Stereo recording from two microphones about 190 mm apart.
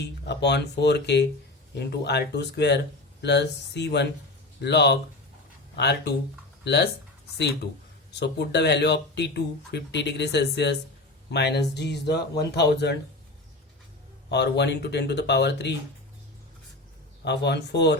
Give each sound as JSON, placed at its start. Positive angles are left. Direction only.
{"t": 0.3, "sound": "speech", "side_deg": 65}
{"t": 14.3, "sound": "speech", "side_deg": 65}
{"t": 17.2, "sound": "speech", "side_deg": 65}